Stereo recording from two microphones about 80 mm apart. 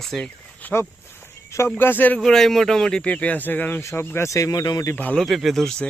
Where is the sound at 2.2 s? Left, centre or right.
Centre; by 4.3 s left.